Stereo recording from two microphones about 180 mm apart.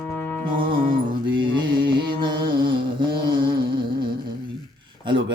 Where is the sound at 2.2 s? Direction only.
25° right (ahead or behind).